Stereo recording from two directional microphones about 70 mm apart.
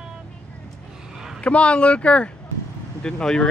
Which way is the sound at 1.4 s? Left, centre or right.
Centre.